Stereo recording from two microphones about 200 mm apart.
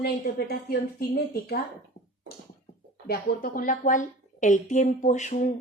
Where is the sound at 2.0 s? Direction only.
30° left (ahead or behind).